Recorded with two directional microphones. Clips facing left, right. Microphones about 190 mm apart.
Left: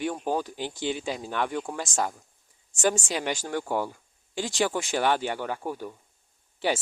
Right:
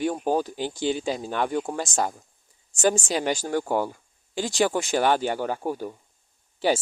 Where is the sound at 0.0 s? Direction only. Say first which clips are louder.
Right 4 dB; 40° right (ahead or behind).